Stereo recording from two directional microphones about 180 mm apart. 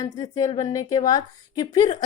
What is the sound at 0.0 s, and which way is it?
Speech, 20° left (ahead or behind).